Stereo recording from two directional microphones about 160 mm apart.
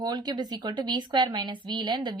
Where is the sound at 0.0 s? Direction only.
25° right (ahead or behind).